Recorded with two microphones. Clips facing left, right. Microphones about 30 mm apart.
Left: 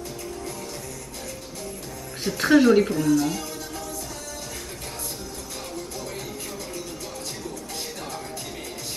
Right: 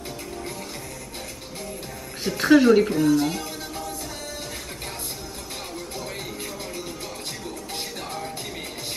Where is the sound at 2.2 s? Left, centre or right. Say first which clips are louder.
Right 1 dB; centre.